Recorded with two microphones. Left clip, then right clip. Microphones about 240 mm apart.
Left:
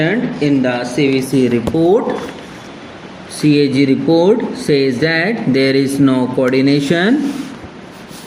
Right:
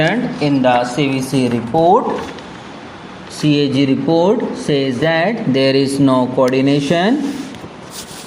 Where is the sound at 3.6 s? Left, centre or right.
Centre.